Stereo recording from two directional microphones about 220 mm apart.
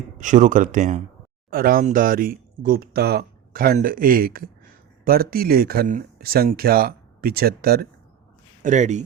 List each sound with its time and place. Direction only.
0.2 s speech: 35° right (ahead or behind)
8.6 s speech: 35° right (ahead or behind)